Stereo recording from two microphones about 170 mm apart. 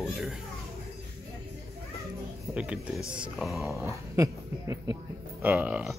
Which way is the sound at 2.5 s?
5° right (ahead or behind).